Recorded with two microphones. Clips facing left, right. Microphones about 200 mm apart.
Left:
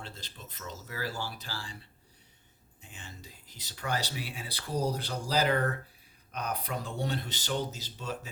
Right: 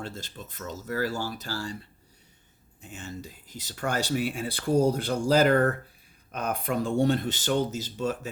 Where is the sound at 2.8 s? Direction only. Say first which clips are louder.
Right 11 dB; 45° right (ahead or behind).